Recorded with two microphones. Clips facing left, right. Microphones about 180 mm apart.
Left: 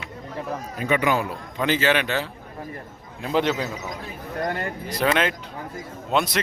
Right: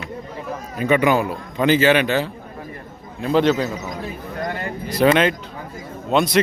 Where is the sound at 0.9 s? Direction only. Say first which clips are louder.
Right 5 dB; 65° right (ahead or behind).